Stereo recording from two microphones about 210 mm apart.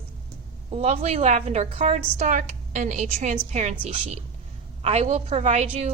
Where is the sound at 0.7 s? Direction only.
30° right (ahead or behind).